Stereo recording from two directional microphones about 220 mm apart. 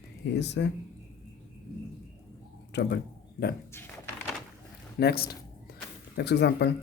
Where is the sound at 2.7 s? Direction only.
50° left (ahead or behind).